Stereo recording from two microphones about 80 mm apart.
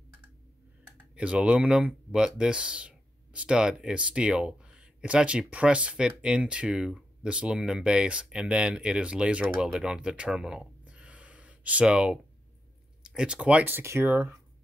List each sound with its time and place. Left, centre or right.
1.1 s speech: centre
13.7 s speech: right